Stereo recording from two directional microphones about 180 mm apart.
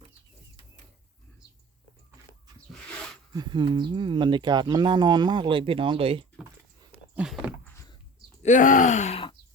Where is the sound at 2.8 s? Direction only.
5° left (ahead or behind).